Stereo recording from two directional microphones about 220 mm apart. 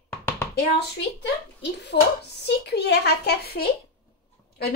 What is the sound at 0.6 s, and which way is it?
Speech, 50° left (ahead or behind).